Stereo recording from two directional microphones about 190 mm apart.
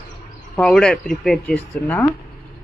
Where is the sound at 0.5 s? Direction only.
5° left (ahead or behind).